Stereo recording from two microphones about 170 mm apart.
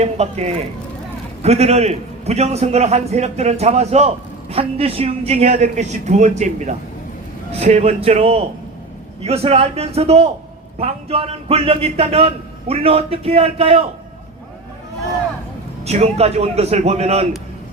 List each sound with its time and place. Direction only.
0.0 s a man's voice: 40° right (ahead or behind)
15.8 s a man's voice: 40° right (ahead or behind)